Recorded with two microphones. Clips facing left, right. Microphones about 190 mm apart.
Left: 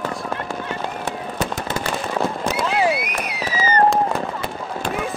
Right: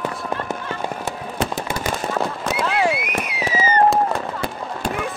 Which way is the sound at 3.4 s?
20° right (ahead or behind).